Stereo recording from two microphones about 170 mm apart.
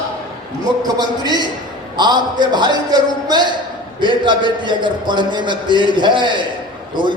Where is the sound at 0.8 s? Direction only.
25° right (ahead or behind).